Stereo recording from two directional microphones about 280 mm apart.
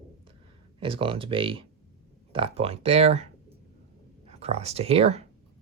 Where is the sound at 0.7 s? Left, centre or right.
Centre.